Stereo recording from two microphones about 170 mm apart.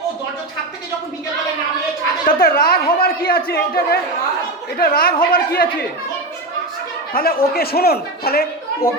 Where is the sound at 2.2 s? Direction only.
60° left (ahead or behind).